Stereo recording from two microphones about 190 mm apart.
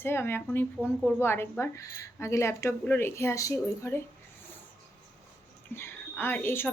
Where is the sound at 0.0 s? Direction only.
10° left (ahead or behind).